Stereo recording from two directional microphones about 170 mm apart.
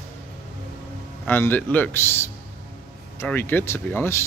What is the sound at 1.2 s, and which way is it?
Speech, 10° left (ahead or behind).